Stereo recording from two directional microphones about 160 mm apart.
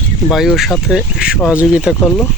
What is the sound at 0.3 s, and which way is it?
Speech, centre (ahead or behind).